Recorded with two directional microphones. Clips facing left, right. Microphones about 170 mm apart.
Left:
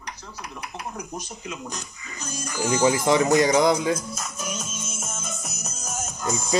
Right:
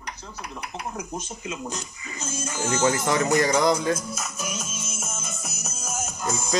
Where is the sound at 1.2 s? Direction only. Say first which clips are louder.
Right 2 dB; 25° right (ahead or behind).